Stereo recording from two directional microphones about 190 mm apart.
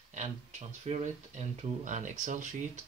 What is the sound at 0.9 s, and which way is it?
Speech, 40° right (ahead or behind).